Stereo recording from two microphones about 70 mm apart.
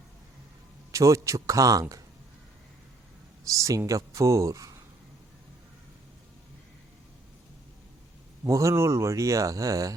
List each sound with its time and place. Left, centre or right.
0.9 s speech: right
3.4 s speech: right
8.4 s speech: right